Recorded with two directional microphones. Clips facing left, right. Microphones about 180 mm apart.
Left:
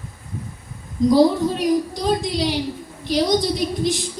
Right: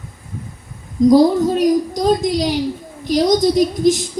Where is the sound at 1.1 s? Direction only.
45° right (ahead or behind).